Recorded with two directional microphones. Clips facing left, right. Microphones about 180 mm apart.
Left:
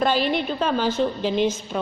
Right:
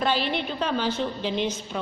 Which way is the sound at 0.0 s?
45° left (ahead or behind).